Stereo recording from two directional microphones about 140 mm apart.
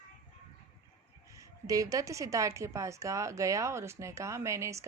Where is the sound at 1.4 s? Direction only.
25° right (ahead or behind).